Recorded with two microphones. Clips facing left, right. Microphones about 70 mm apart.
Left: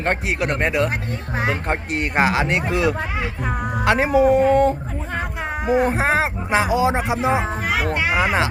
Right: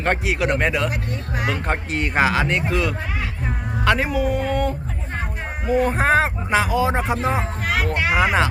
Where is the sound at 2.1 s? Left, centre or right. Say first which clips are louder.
Even; centre.